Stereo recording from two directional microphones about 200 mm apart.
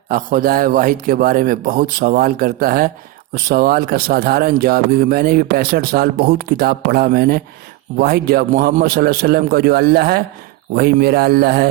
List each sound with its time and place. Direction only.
0.1 s speech: 45° right (ahead or behind)